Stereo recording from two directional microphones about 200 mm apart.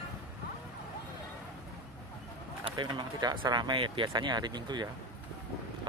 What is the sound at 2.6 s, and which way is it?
Speech, 25° right (ahead or behind).